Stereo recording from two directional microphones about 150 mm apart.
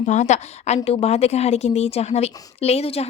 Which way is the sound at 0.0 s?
50° left (ahead or behind).